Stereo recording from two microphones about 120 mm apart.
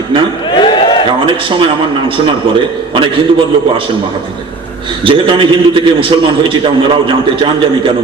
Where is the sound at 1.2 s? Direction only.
45° right (ahead or behind).